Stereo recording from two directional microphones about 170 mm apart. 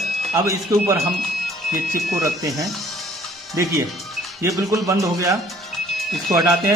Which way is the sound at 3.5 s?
20° right (ahead or behind).